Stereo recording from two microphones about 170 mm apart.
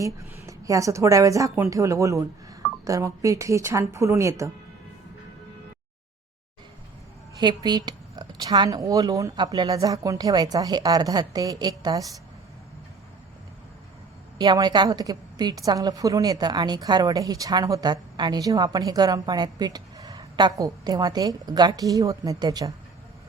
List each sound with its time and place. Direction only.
0.0 s a woman's voice: 20° right (ahead or behind)
7.3 s a woman's voice: 25° right (ahead or behind)
14.3 s a woman's voice: 25° right (ahead or behind)